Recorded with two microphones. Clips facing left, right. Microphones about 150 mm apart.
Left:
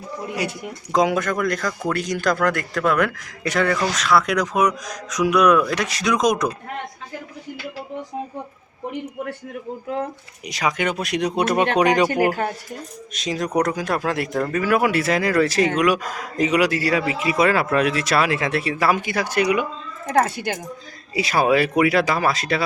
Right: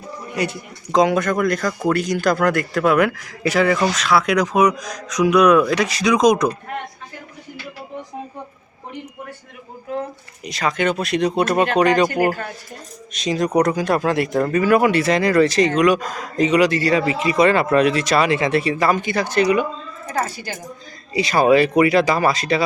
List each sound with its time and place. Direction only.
0.4 s speech: 10° left (ahead or behind)
10.4 s speech: 10° left (ahead or behind)
13.1 s speech: centre (ahead or behind)
20.1 s speech: 65° left (ahead or behind)
21.1 s speech: 5° left (ahead or behind)